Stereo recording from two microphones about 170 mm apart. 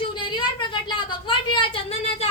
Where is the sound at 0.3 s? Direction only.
25° left (ahead or behind).